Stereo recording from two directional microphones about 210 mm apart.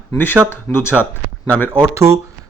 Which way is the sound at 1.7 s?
15° right (ahead or behind).